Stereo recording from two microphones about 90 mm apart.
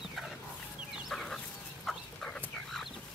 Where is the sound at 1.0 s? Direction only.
5° left (ahead or behind).